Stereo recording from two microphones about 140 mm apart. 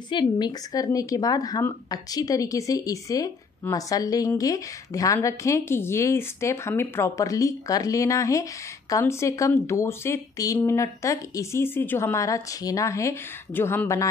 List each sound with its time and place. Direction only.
0.1 s speech: 30° left (ahead or behind)